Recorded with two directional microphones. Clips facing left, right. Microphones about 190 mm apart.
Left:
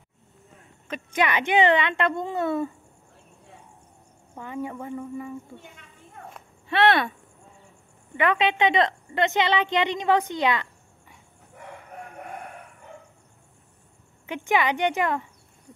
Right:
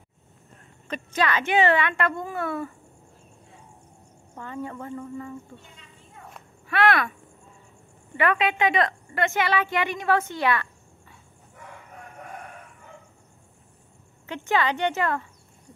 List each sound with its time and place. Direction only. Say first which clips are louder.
0.8 s speech: even; 10° left (ahead or behind)
4.4 s speech: left 2 dB; 15° left (ahead or behind)
5.6 s a sound: left 3 dB; 55° left (ahead or behind)
6.7 s a sound: left 2 dB; 25° left (ahead or behind)
8.2 s a woman's voice: left 1 dB; 20° left (ahead or behind)
14.2 s speech: left 1 dB; 10° left (ahead or behind)